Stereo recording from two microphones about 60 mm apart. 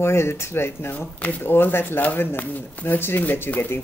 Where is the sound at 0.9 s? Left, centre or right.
Left.